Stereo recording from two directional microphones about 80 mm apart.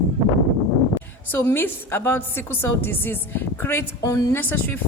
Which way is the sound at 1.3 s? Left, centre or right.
Left.